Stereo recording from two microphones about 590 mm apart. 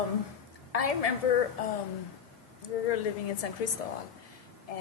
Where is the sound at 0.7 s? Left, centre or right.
Left.